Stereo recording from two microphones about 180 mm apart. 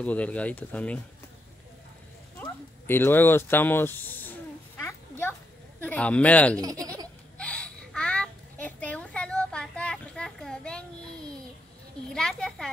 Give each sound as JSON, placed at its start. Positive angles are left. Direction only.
{"t": 0.0, "sound": "speech", "side_deg": 5}
{"t": 2.4, "sound": "a sound", "side_deg": 10}
{"t": 5.8, "sound": "speech", "side_deg": 10}
{"t": 6.6, "sound": "speech", "side_deg": -20}
{"t": 7.3, "sound": "a sound", "side_deg": 5}
{"t": 12.1, "sound": "a child's voice", "side_deg": 5}